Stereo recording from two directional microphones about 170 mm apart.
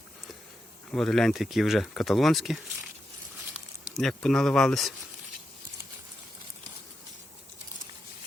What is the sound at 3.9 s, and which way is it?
Speech, 5° left (ahead or behind).